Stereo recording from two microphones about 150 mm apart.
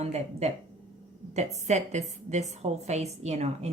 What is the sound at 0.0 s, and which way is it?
A woman's voice, 45° right (ahead or behind).